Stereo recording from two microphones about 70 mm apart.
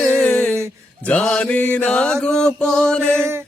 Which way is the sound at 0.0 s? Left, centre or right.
Centre.